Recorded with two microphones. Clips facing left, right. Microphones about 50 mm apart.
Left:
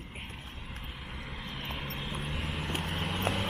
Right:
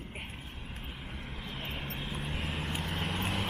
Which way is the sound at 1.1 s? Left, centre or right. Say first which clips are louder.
Left 2 dB; left.